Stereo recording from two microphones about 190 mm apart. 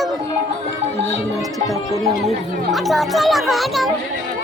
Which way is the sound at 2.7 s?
Centre (ahead or behind).